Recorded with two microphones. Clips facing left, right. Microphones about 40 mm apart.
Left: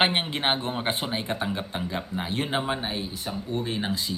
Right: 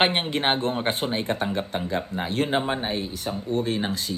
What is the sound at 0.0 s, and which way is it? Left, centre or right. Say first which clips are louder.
A man's voice: right 2 dB; centre.